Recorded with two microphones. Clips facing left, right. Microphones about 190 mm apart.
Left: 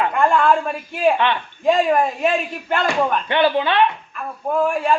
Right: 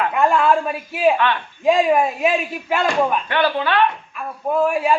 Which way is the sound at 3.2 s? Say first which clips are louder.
Left 2 dB; 20° left (ahead or behind).